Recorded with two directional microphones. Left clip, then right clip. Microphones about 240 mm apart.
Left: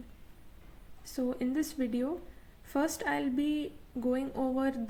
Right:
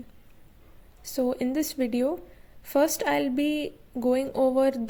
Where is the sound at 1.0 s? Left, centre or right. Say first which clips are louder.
Right 7 dB; right.